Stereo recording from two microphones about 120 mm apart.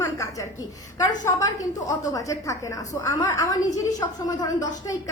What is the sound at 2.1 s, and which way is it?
A woman's voice, 30° left (ahead or behind).